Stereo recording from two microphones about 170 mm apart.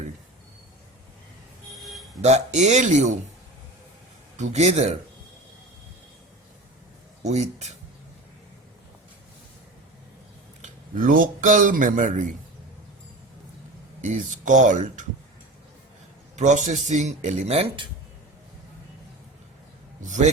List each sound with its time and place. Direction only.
1.7 s a sound: centre (ahead or behind)
2.2 s speech: 40° right (ahead or behind)
4.4 s speech: 40° right (ahead or behind)
7.2 s speech: 40° right (ahead or behind)
10.6 s speech: 55° right (ahead or behind)
14.0 s speech: 45° right (ahead or behind)
16.3 s speech: 45° right (ahead or behind)
20.0 s speech: 45° right (ahead or behind)